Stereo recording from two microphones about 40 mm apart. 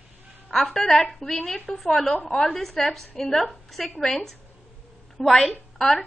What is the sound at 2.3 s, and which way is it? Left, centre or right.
Speech, centre.